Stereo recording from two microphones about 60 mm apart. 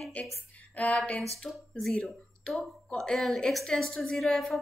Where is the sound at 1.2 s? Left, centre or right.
Centre.